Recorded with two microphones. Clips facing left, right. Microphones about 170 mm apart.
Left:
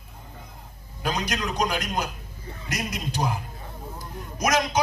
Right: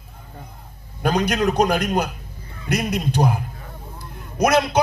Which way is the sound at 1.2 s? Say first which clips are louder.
Right 9 dB; 60° right (ahead or behind).